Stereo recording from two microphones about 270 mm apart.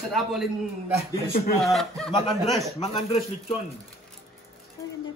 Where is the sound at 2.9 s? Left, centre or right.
Left.